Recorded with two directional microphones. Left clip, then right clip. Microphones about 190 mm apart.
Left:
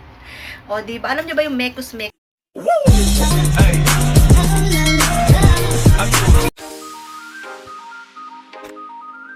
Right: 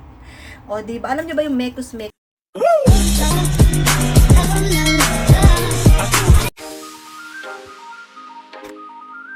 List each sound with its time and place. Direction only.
0.8 s a woman's voice: 5° right (ahead or behind)
2.8 s music: centre (ahead or behind)